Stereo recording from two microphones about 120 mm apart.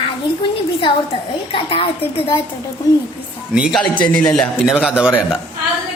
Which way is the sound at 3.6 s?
5° right (ahead or behind).